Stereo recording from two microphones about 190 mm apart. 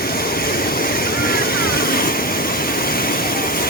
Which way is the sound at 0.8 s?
50° left (ahead or behind).